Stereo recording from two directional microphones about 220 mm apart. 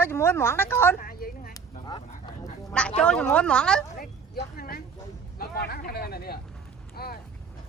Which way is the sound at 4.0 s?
40° left (ahead or behind).